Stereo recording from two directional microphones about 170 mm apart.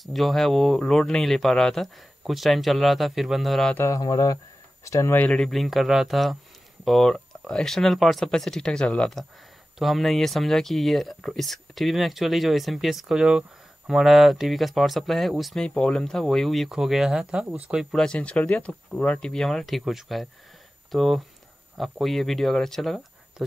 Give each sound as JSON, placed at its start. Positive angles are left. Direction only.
{"t": 0.0, "sound": "speech", "side_deg": 0}
{"t": 3.7, "sound": "speech", "side_deg": 15}